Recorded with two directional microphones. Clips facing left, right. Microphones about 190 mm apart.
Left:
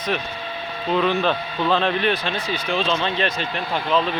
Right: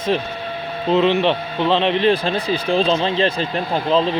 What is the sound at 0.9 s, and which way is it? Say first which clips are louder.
A man's voice: right 4 dB; 25° right (ahead or behind).